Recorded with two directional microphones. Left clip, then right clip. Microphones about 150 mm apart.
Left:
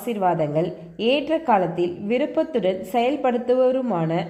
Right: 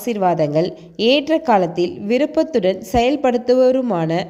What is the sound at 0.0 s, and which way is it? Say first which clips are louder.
A woman's voice: right 4 dB; 30° right (ahead or behind).